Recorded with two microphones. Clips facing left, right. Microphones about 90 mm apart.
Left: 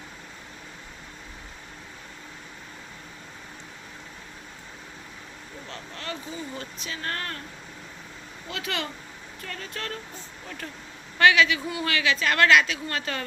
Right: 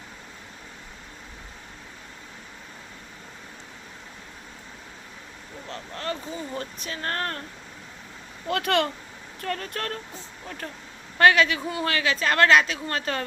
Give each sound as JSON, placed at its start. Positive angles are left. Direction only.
{"t": 5.6, "sound": "speech", "side_deg": -35}
{"t": 8.4, "sound": "speech", "side_deg": -55}